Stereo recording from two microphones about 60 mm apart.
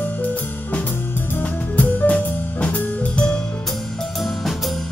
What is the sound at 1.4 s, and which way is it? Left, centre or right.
Music, left.